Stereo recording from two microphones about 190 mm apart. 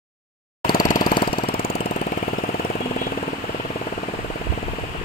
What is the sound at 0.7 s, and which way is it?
Engine, 45° left (ahead or behind).